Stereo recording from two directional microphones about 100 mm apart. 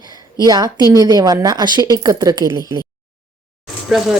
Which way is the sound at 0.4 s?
40° right (ahead or behind).